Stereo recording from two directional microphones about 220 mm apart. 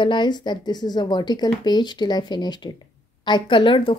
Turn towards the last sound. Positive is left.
turn(degrees=25)  # may be behind; listen again after turning